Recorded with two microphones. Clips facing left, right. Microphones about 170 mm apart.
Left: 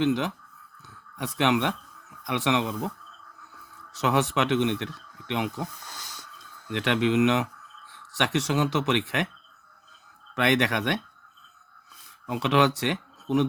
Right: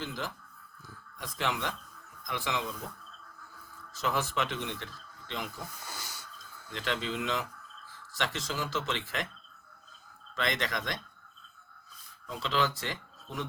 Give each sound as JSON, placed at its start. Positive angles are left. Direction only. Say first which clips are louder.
{"t": 0.0, "sound": "speech", "louder": "left 13 dB", "side_deg": 70}
{"t": 3.9, "sound": "speech", "louder": "left 7 dB", "side_deg": 75}
{"t": 5.8, "sound": "a sound", "louder": "even", "side_deg": -5}
{"t": 6.4, "sound": "speech", "louder": "left 9 dB", "side_deg": 70}
{"t": 10.3, "sound": "speech", "louder": "left 9 dB", "side_deg": 70}
{"t": 12.2, "sound": "speech", "louder": "left 8 dB", "side_deg": 75}